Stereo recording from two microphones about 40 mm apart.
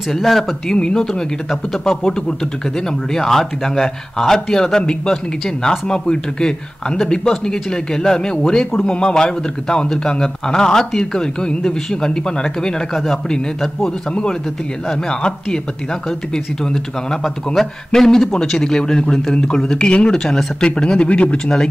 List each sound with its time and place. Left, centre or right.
0.1 s speech: centre
12.9 s speech: centre
14.9 s speech: centre